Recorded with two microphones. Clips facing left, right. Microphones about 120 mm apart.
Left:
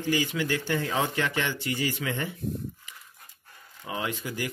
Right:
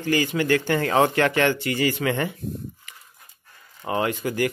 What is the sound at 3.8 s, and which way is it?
Speech, 60° right (ahead or behind).